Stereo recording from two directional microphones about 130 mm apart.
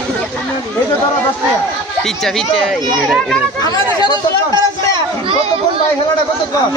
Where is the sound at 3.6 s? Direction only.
30° left (ahead or behind).